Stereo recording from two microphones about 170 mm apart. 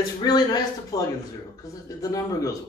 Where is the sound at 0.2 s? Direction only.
25° left (ahead or behind).